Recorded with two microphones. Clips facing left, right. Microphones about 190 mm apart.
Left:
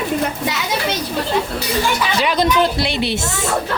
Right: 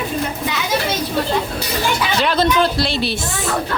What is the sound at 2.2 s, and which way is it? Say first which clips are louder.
Speech: even; 15° left (ahead or behind).